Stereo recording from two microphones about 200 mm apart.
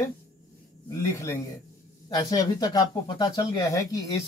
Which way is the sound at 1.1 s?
15° left (ahead or behind).